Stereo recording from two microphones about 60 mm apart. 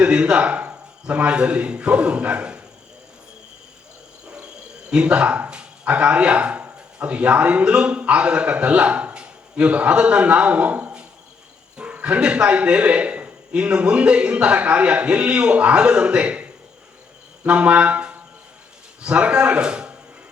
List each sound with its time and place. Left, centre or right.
0.0 s a man's voice: centre
4.9 s speech: centre
17.4 s a sound: right
19.0 s speech: centre